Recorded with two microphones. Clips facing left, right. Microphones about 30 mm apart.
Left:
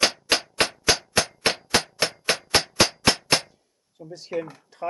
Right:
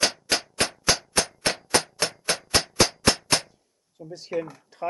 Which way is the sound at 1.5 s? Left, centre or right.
Centre.